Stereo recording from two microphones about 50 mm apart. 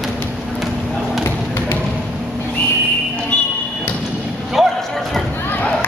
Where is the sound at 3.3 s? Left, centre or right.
Left.